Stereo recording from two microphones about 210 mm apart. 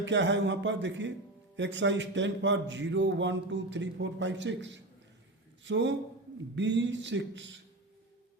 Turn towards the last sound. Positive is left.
turn(degrees=-60)  # may be behind; listen again after turning